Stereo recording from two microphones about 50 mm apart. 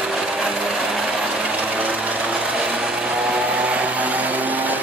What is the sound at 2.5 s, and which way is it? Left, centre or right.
Vehicle, centre.